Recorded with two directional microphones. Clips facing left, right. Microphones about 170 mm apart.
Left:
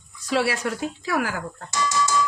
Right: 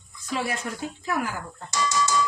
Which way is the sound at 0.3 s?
85° left.